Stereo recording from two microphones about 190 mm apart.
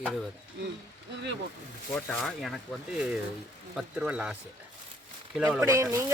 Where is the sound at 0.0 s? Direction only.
Centre (ahead or behind).